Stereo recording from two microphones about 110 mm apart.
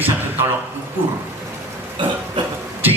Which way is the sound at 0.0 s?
20° right (ahead or behind).